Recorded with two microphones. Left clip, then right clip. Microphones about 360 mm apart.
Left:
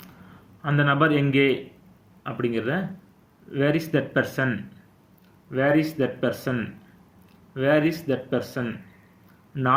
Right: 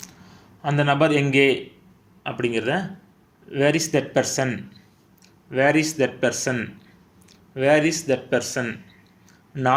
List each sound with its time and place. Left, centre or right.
0.6 s a man's voice: centre